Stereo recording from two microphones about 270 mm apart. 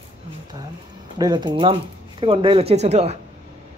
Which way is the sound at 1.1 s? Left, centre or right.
Centre.